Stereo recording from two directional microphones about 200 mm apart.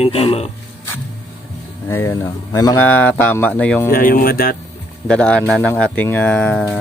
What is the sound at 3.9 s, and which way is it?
Speech, 45° left (ahead or behind).